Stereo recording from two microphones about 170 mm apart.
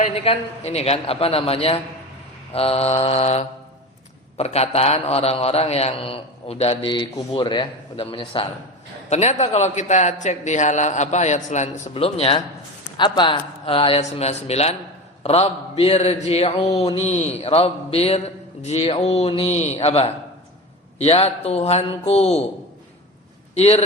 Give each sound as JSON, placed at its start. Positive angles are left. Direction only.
{"t": 0.0, "sound": "a man's voice", "side_deg": 40}
{"t": 9.0, "sound": "a man's voice", "side_deg": 40}
{"t": 23.6, "sound": "a man's voice", "side_deg": 40}